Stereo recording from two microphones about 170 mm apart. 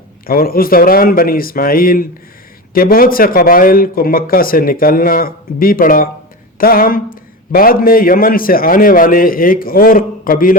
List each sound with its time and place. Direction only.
0.3 s a man's voice: 60° left (ahead or behind)